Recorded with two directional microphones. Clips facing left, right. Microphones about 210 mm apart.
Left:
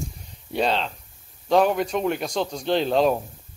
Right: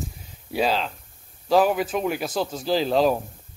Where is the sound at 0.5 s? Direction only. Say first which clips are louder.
Even; 5° right (ahead or behind).